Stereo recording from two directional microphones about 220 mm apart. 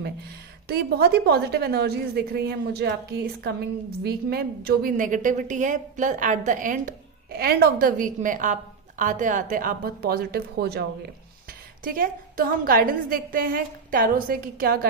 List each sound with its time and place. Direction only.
0.7 s a woman's voice: 45° right (ahead or behind)